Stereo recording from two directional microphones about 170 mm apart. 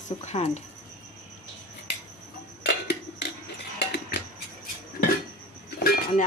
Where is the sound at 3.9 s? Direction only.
85° left.